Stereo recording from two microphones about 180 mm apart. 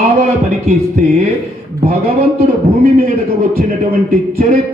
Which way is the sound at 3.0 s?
55° right (ahead or behind).